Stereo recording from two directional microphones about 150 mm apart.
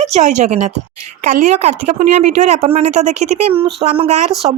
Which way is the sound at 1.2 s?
55° right (ahead or behind).